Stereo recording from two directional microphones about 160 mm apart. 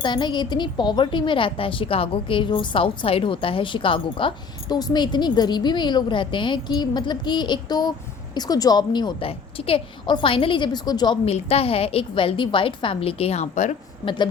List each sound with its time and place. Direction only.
0.0 s a woman's voice: 30° left (ahead or behind); by 13.7 s 45° left (ahead or behind)
14.0 s a woman's voice: 30° left (ahead or behind)